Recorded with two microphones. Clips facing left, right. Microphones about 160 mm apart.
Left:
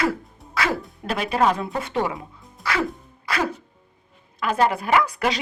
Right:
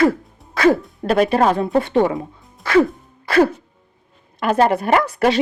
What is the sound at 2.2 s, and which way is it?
Music, 45° right (ahead or behind).